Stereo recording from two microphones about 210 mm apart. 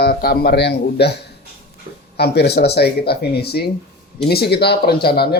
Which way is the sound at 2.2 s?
50° left (ahead or behind).